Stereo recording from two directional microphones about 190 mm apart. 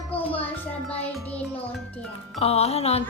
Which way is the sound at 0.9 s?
10° left (ahead or behind).